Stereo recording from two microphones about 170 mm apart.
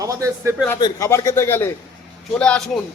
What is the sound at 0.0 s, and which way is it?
Speech, 20° right (ahead or behind).